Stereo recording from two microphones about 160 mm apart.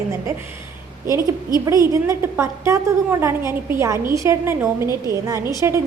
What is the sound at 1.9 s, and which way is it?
Speech, 20° right (ahead or behind).